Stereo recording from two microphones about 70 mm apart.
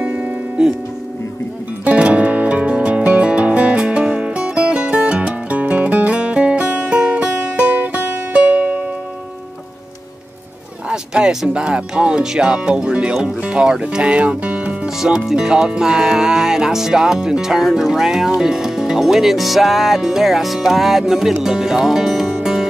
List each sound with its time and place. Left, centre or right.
0.0 s music: right
1.9 s music: centre
10.9 s music: centre
13.4 s speech: centre
14.9 s music: centre